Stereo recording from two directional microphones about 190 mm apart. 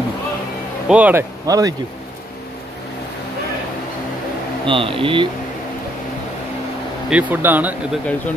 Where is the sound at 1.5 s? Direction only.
20° right (ahead or behind).